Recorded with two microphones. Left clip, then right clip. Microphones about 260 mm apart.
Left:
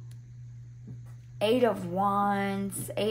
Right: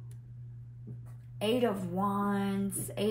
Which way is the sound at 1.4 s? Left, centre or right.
Left.